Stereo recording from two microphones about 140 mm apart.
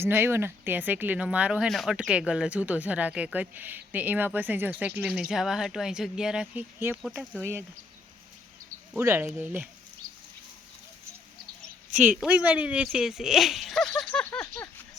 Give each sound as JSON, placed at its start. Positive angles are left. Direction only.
{"t": 0.0, "sound": "speech", "side_deg": -15}
{"t": 8.9, "sound": "speech", "side_deg": -15}
{"t": 11.9, "sound": "speech", "side_deg": -5}